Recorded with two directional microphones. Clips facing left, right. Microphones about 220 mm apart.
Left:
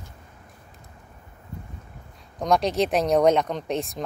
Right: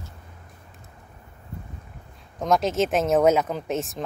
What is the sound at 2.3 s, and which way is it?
Speech, centre (ahead or behind).